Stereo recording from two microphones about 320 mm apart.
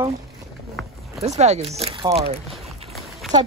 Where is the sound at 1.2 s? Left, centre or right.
Right.